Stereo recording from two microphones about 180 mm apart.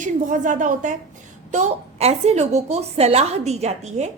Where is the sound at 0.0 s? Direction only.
45° right (ahead or behind).